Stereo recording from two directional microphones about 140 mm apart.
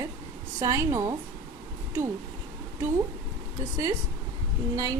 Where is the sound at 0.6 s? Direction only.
20° right (ahead or behind).